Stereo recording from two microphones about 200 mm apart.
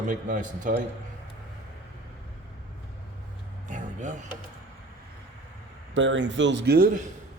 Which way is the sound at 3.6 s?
40° right (ahead or behind).